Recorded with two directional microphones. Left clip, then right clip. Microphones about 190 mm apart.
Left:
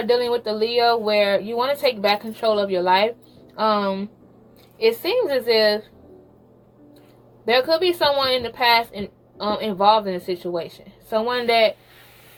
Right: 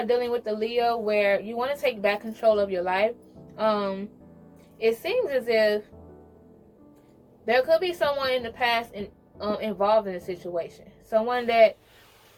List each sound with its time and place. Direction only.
0.1 s a woman's voice: 30° left (ahead or behind)
7.4 s a woman's voice: 35° left (ahead or behind)